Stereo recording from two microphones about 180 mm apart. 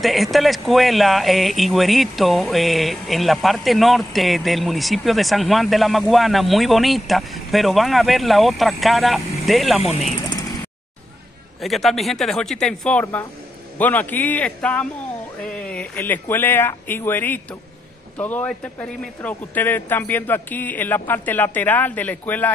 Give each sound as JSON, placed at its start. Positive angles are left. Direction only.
{"t": 0.0, "sound": "speech", "side_deg": 0}
{"t": 9.8, "sound": "speech", "side_deg": 35}
{"t": 11.6, "sound": "speech", "side_deg": 0}
{"t": 13.0, "sound": "a man's voice", "side_deg": 15}